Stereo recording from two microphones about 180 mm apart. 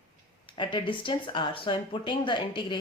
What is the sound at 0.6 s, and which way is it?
Speech, 25° left (ahead or behind).